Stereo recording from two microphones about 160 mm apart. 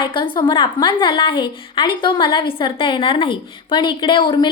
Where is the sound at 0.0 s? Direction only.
30° left (ahead or behind).